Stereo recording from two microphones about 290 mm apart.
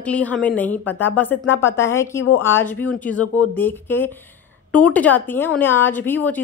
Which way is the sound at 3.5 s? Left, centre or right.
Centre.